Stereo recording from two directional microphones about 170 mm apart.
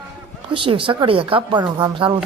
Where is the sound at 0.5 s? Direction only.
30° right (ahead or behind).